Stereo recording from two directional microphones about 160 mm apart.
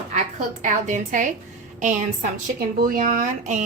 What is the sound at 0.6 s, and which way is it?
A woman's voice, 50° right (ahead or behind).